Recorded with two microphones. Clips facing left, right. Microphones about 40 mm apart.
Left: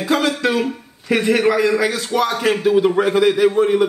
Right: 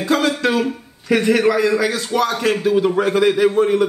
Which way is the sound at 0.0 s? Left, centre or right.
Centre.